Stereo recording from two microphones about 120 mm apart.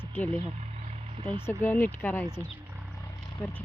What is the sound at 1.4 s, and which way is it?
Speech, 20° left (ahead or behind).